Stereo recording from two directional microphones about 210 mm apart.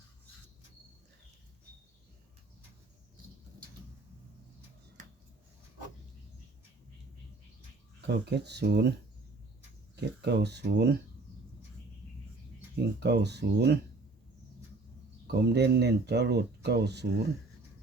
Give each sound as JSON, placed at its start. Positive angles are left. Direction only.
{"t": 8.0, "sound": "speech", "side_deg": -55}
{"t": 9.9, "sound": "speech", "side_deg": -55}
{"t": 12.7, "sound": "speech", "side_deg": -50}
{"t": 15.3, "sound": "speech", "side_deg": -50}